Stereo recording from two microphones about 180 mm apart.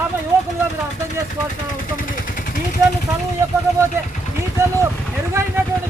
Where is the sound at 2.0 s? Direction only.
50° left (ahead or behind).